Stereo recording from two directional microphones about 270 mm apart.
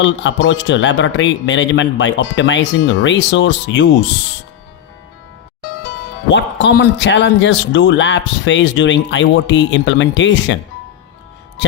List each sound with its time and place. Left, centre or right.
0.0 s speech: left
6.3 s speech: left